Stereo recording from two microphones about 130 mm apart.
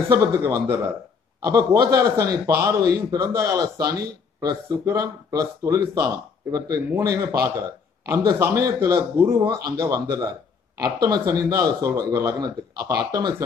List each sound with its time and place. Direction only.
0.2 s a man's voice: 25° right (ahead or behind)